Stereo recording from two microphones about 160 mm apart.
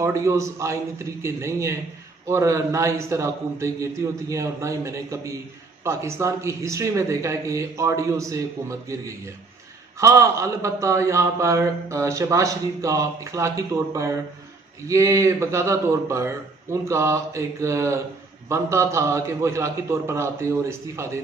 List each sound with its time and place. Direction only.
0.0 s a man's voice: 20° right (ahead or behind)